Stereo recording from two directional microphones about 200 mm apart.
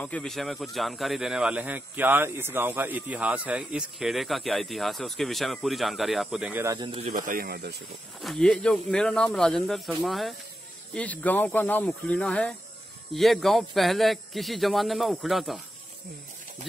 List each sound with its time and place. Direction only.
0.0 s a man's voice: 5° left (ahead or behind); by 7.2 s 30° right (ahead or behind)
7.2 s speech: 45° right (ahead or behind)
8.2 s a man's voice: centre (ahead or behind)